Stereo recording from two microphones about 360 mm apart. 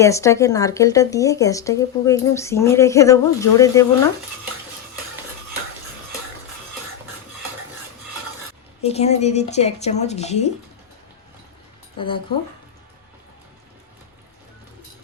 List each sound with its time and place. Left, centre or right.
0.0 s speech: centre
8.8 s speech: centre
11.9 s speech: centre